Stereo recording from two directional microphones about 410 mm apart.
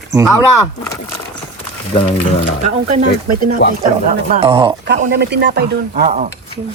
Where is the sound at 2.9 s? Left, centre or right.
Centre.